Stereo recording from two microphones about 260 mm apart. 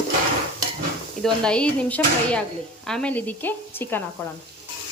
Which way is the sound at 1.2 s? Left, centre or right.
Centre.